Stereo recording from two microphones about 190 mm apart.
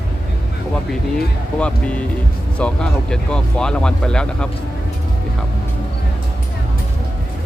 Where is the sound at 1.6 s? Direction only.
5° left (ahead or behind).